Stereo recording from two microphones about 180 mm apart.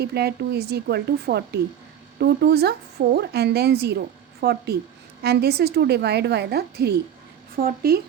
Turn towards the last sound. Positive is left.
turn(degrees=-55)  # may be behind; listen again after turning